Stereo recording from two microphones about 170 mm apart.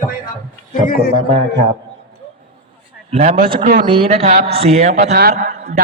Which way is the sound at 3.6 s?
50° right (ahead or behind).